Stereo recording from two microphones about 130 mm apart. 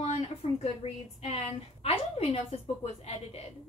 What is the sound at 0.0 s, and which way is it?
A woman's voice, 60° left (ahead or behind).